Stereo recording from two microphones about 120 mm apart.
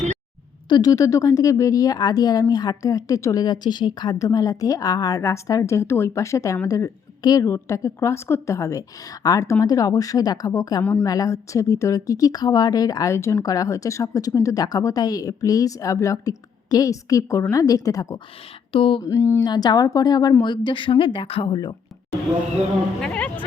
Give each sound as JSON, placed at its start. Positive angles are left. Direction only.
{"t": 0.7, "sound": "a woman's voice", "side_deg": 30}
{"t": 3.4, "sound": "a woman's voice", "side_deg": 35}
{"t": 18.7, "sound": "speech", "side_deg": 50}
{"t": 19.0, "sound": "a woman's voice", "side_deg": 25}
{"t": 23.0, "sound": "a woman's voice", "side_deg": 10}